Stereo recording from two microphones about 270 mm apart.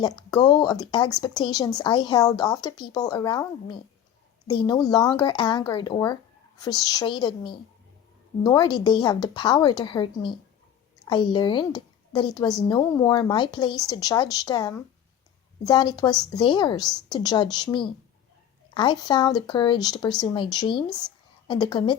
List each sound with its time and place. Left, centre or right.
0.3 s a woman's voice: centre